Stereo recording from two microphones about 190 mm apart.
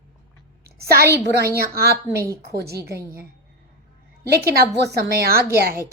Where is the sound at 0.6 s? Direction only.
55° right (ahead or behind).